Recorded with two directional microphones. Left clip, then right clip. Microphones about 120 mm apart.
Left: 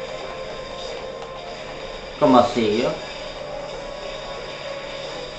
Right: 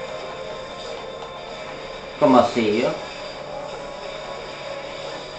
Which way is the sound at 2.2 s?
20° right (ahead or behind).